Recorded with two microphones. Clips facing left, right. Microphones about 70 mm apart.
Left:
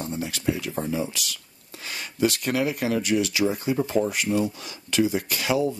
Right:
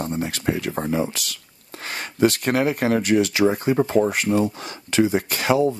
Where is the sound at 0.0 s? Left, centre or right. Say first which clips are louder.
Right 3 dB; right.